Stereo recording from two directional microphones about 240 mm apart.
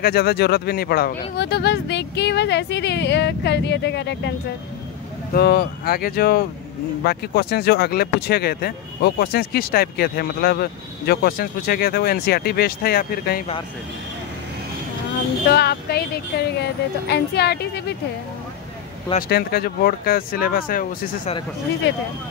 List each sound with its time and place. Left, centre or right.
0.0 s speech: left
5.3 s speech: left
15.4 s speech: left
19.1 s speech: left